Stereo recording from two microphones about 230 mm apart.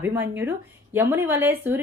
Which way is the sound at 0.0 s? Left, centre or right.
Centre.